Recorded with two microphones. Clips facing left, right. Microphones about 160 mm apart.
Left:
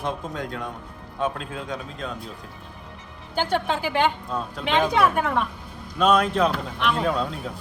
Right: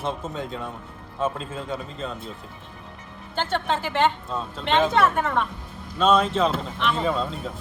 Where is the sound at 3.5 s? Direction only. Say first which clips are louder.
Left 1 dB; 5° left (ahead or behind).